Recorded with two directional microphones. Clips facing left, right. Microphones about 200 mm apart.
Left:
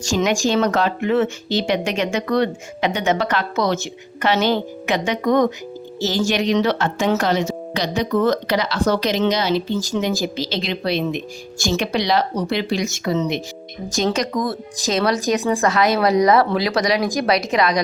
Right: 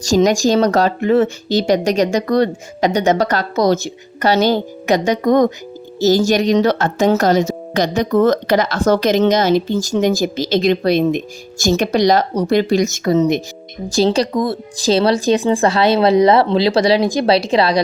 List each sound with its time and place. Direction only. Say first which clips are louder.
0.0 s speech: right 6 dB; 40° right (ahead or behind)
13.9 s speech: right 6 dB; 30° right (ahead or behind)